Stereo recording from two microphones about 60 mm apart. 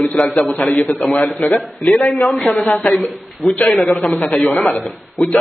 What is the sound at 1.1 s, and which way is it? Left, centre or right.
A man's voice, centre.